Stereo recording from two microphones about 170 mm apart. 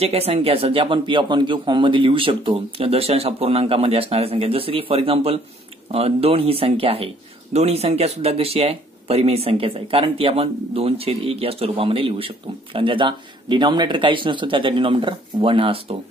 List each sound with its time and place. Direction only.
0.0 s speech: 35° right (ahead or behind)